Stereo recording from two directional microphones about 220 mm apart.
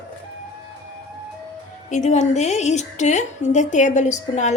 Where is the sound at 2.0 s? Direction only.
30° left (ahead or behind).